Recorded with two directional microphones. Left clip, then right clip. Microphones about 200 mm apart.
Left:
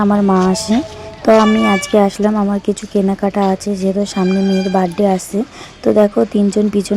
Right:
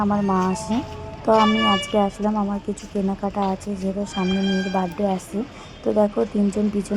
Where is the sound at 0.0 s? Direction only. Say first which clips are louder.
Left 8 dB; 40° left (ahead or behind).